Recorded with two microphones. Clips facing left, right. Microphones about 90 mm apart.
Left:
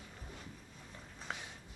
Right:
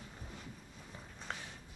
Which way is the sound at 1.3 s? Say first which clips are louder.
Even; 5° left (ahead or behind).